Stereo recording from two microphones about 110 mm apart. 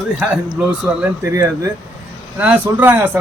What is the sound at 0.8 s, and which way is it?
Speech, 15° right (ahead or behind).